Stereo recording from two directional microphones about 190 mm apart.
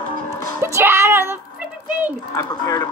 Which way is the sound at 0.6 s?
15° right (ahead or behind).